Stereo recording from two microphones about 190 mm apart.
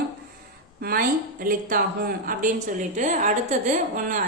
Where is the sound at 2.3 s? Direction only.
45° right (ahead or behind).